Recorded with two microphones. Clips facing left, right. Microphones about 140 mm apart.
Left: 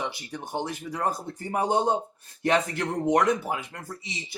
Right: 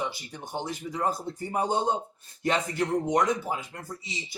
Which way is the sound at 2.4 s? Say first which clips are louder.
Left 2 dB; 60° left (ahead or behind).